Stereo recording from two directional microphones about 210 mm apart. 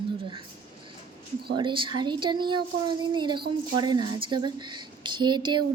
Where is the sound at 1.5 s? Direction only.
25° right (ahead or behind).